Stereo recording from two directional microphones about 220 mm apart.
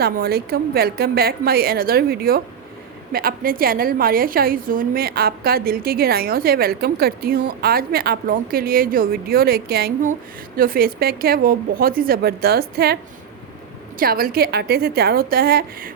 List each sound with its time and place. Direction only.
0.0 s a woman's voice: 45° right (ahead or behind)
14.0 s a woman's voice: 40° right (ahead or behind)